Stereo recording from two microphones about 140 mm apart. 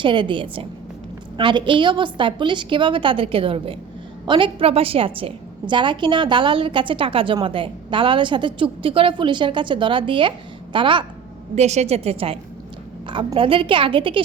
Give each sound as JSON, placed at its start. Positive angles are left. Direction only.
{"t": 0.0, "sound": "a woman's voice", "side_deg": -35}
{"t": 11.5, "sound": "a woman's voice", "side_deg": -50}